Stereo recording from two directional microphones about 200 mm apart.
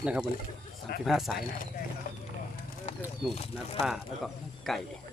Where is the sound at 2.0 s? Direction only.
40° left (ahead or behind).